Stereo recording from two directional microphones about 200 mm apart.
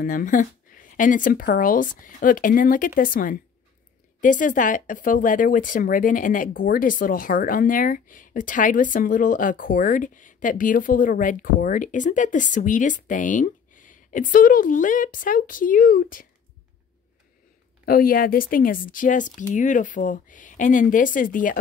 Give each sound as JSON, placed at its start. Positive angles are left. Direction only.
{"t": 0.0, "sound": "speech", "side_deg": 40}
{"t": 17.8, "sound": "speech", "side_deg": 45}